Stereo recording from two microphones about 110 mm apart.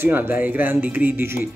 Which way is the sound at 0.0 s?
20° right (ahead or behind).